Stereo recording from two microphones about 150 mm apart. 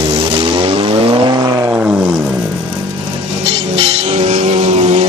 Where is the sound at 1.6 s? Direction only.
10° right (ahead or behind).